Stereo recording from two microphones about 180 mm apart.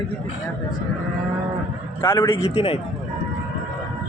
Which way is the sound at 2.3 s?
30° left (ahead or behind).